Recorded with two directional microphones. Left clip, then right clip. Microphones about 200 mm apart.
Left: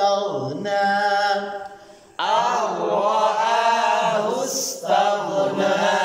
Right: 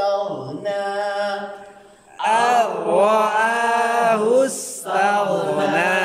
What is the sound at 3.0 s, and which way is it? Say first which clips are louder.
Chant: right 5 dB; 60° right (ahead or behind).